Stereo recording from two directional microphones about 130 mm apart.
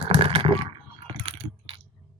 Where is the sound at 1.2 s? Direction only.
45° right (ahead or behind).